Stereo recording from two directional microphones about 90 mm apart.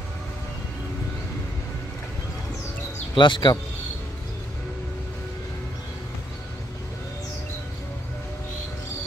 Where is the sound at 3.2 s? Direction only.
60° left (ahead or behind).